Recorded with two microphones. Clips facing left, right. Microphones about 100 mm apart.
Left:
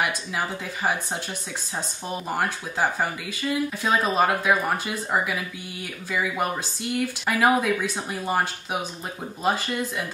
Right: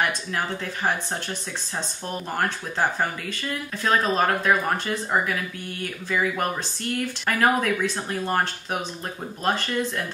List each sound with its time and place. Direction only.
2.3 s speech: 10° left (ahead or behind)